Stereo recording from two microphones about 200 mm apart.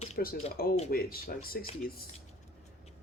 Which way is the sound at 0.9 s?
45° left (ahead or behind).